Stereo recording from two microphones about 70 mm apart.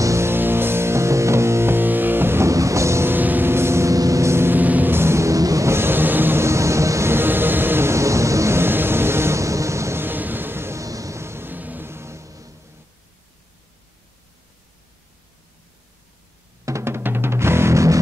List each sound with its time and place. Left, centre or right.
0.0 s music: right
2.4 s music: right
3.1 s music: right
5.7 s vehicle: right
6.4 s music: right
10.0 s music: right
10.8 s music: right
16.6 s music: right